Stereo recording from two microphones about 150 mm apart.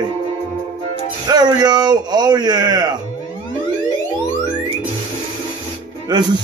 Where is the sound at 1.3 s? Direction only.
25° right (ahead or behind).